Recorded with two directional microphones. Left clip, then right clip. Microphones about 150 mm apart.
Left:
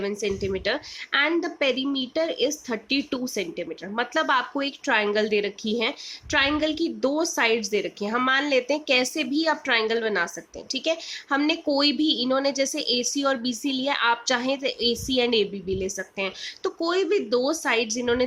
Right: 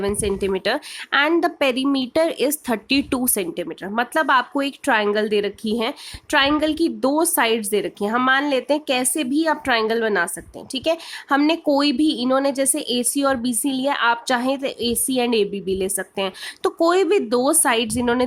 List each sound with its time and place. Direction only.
0.0 s a woman's voice: 55° right (ahead or behind)